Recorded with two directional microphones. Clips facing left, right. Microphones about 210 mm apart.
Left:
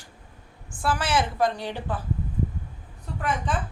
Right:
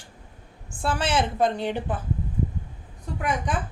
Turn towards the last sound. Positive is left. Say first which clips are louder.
# right 1 dB
turn(degrees=-15)  # may be behind; listen again after turning